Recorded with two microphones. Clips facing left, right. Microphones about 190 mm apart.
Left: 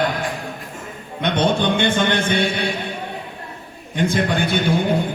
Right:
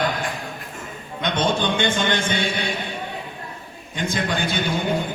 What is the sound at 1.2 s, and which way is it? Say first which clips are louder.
Speech: left 3 dB; 60° left (ahead or behind).